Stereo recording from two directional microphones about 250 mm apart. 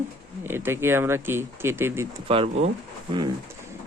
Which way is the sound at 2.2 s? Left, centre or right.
Right.